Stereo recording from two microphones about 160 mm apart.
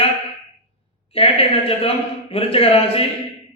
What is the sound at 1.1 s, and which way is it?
Speech, 35° left (ahead or behind).